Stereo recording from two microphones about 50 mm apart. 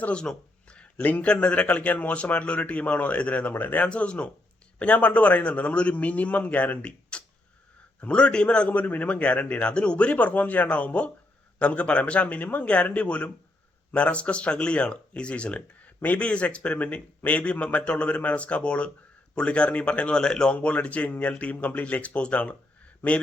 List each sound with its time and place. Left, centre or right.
0.2 s a sound: centre
1.0 s speech: left
1.3 s speech: left
3.8 s speech: left